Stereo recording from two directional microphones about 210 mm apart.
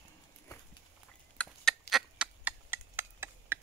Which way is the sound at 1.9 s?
5° right (ahead or behind).